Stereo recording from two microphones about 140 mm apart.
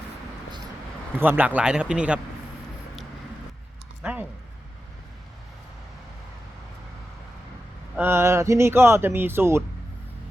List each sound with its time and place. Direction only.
1.2 s speech: 15° right (ahead or behind)
4.0 s speech: 10° right (ahead or behind)
7.9 s speech: 15° right (ahead or behind)